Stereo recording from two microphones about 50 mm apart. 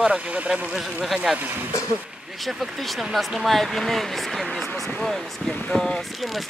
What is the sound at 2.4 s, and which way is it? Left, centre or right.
Speech, centre.